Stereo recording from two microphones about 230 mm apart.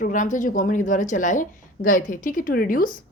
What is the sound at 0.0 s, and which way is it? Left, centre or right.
A woman's voice, left.